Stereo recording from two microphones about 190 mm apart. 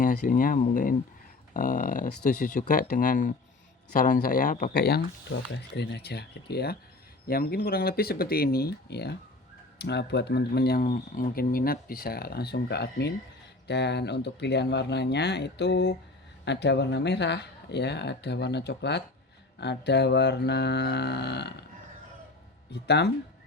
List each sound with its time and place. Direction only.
0.0 s speech: 45° left (ahead or behind); by 21.6 s 60° left (ahead or behind)
22.7 s speech: 60° left (ahead or behind)